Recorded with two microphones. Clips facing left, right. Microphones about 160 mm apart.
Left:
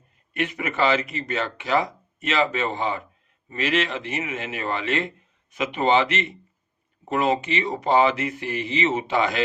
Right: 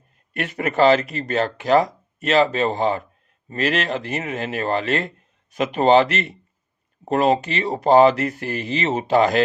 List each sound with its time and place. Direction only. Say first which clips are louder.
0.3 s a man's voice: right 5 dB; 40° right (ahead or behind)